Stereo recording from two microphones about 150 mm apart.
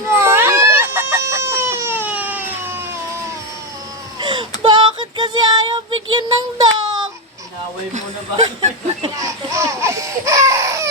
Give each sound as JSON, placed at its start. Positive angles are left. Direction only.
{"t": 0.1, "sound": "baby cry", "side_deg": -15}
{"t": 4.2, "sound": "baby cry", "side_deg": -30}
{"t": 4.6, "sound": "child singing", "side_deg": -30}
{"t": 7.9, "sound": "a sound", "side_deg": -50}
{"t": 9.2, "sound": "laughter", "side_deg": -20}